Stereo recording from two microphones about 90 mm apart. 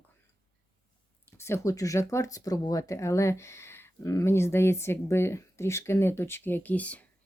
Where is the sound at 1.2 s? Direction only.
30° left (ahead or behind).